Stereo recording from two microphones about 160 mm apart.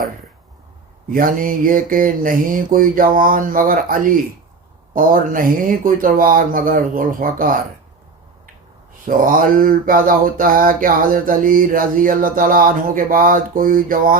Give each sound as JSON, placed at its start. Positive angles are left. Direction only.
{"t": 1.1, "sound": "speech", "side_deg": -60}
{"t": 9.0, "sound": "speech", "side_deg": -60}